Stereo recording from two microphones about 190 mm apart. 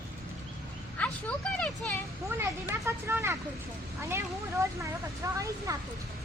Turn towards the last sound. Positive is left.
turn(degrees=-15)  # may be behind; listen again after turning